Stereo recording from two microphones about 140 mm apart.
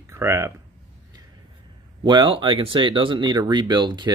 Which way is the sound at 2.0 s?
35° right (ahead or behind).